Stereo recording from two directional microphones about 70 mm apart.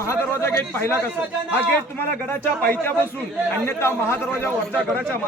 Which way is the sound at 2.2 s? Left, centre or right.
Left.